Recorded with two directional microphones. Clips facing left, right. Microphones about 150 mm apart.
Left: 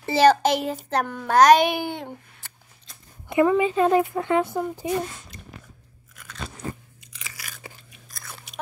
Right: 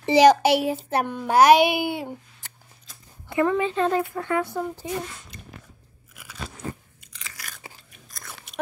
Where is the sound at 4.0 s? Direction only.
20° left (ahead or behind).